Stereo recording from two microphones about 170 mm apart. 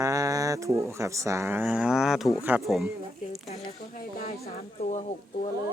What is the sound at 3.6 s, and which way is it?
Speech, 55° left (ahead or behind).